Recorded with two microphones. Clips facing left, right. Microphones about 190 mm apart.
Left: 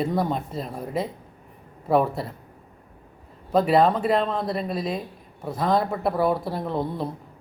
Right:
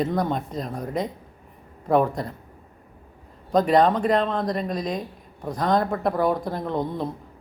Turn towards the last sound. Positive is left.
turn(degrees=5)  # may be behind; listen again after turning